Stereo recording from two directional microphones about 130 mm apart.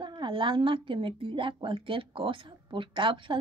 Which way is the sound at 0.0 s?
35° right (ahead or behind).